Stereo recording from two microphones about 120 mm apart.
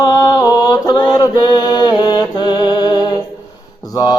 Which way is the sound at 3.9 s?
35° left (ahead or behind).